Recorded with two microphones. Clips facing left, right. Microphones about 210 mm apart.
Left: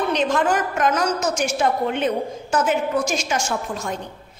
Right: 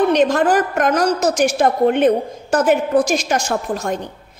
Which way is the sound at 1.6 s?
55° right (ahead or behind).